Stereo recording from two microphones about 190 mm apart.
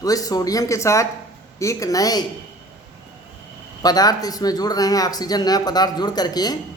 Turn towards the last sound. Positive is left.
turn(degrees=20)  # may be behind; listen again after turning